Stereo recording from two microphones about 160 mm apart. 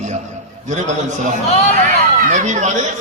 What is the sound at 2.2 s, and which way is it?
Speech, 50° right (ahead or behind).